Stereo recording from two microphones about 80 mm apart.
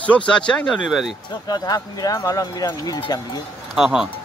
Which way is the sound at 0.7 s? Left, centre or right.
Centre.